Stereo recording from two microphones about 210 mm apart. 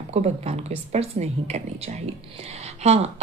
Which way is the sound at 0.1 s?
30° right (ahead or behind).